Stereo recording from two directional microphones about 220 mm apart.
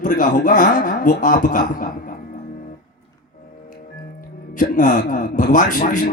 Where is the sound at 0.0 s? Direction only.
35° left (ahead or behind).